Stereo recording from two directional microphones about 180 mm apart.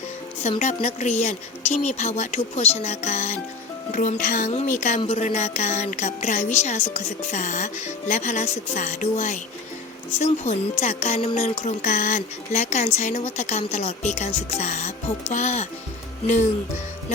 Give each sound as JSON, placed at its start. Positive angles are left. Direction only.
{"t": 0.6, "sound": "a child's voice", "side_deg": 40}